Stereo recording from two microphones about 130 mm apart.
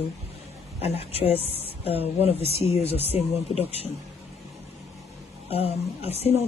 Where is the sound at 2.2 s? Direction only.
50° left (ahead or behind).